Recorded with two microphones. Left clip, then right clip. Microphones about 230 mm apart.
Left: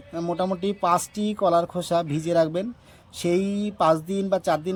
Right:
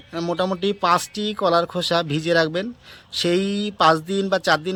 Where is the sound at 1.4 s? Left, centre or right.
Right.